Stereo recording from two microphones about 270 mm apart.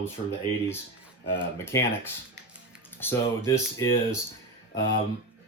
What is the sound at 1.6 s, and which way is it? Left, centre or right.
Speech, centre.